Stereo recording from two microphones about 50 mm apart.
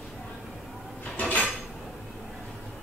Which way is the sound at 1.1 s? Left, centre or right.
Left.